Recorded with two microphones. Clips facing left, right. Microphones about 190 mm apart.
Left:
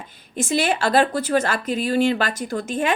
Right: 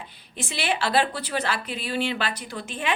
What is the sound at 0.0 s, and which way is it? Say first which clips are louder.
Speech: left 8 dB; 45° left (ahead or behind).